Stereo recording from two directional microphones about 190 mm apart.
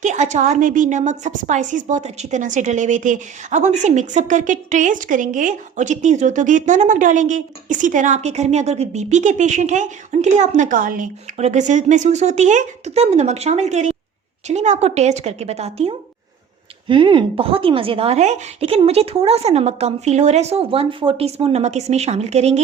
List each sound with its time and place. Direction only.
0.0 s a woman's voice: 40° right (ahead or behind)